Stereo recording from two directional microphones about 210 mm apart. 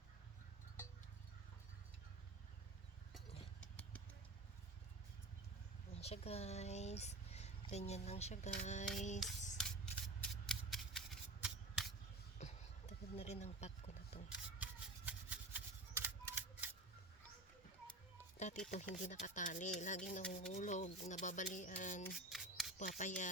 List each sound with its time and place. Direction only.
5.9 s speech: 30° left (ahead or behind)
9.6 s scissors: 5° left (ahead or behind)
10.4 s shuffling cards: 5° left (ahead or behind)
12.4 s a sound: 30° left (ahead or behind)
14.3 s rub: 5° right (ahead or behind)
18.6 s rub: 35° left (ahead or behind)
20.3 s speech: 35° left (ahead or behind)
22.3 s a sound: centre (ahead or behind)
22.8 s speech: 35° left (ahead or behind)